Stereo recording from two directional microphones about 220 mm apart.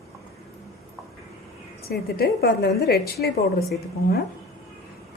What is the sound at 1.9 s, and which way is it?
A woman's voice, 45° left (ahead or behind).